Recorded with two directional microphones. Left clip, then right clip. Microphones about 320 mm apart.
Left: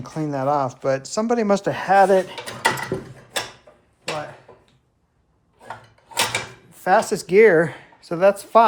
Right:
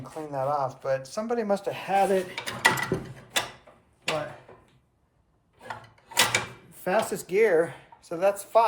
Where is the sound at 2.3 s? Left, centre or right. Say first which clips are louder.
Left 2 dB; centre.